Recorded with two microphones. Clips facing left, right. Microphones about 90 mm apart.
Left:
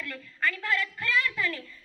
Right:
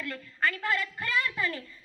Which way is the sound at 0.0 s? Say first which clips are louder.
Right 1 dB; 25° right (ahead or behind).